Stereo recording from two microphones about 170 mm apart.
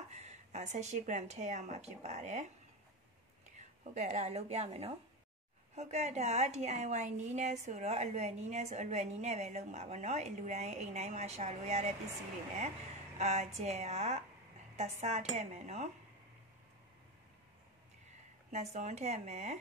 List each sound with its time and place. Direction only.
0.1 s speech: 40° right (ahead or behind)
3.5 s a woman's voice: 45° right (ahead or behind)
13.2 s a woman's voice: 40° right (ahead or behind)
18.5 s speech: 40° right (ahead or behind)